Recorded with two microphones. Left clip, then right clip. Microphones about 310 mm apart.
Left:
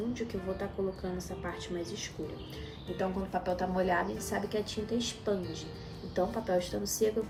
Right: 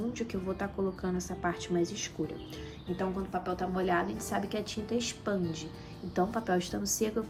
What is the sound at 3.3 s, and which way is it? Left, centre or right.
A woman's voice, centre.